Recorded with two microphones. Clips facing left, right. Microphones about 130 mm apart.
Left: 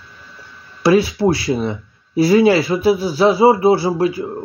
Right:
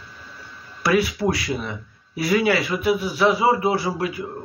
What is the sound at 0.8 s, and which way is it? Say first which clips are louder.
Speech: left 6 dB; 30° left (ahead or behind).